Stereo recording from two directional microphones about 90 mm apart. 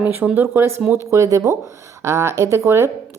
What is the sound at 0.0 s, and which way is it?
Speech, 20° right (ahead or behind).